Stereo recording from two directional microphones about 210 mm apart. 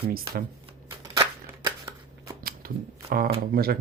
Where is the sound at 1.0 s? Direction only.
15° right (ahead or behind).